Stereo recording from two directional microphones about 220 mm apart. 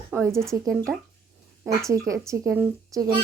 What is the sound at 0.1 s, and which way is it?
Speech, 10° right (ahead or behind).